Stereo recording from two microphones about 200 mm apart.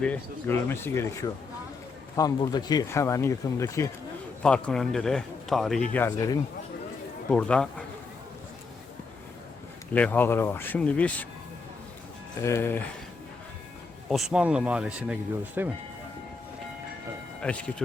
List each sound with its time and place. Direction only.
0.0 s speech: 10° left (ahead or behind)
7.3 s speech: 5° left (ahead or behind)
9.9 s speech: 10° left (ahead or behind)
12.4 s speech: 15° left (ahead or behind)
14.1 s speech: centre (ahead or behind)
17.4 s speech: 5° left (ahead or behind)